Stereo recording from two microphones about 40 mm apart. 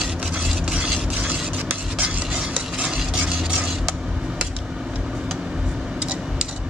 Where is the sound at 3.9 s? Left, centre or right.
Centre.